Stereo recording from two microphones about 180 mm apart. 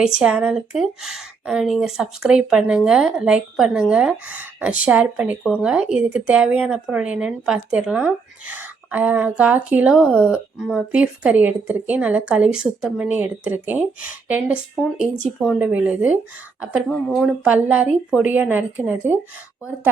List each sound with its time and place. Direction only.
0.0 s a woman's voice: 5° right (ahead or behind)
10.0 s a woman's voice: 5° left (ahead or behind)